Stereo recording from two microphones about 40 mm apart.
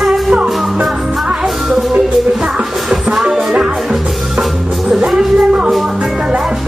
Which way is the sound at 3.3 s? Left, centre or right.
Centre.